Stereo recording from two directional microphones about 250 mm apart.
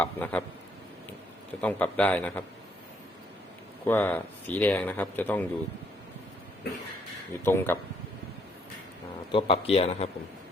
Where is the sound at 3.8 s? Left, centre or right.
Centre.